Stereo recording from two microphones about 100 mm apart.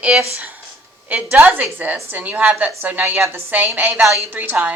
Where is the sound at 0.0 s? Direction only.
10° right (ahead or behind).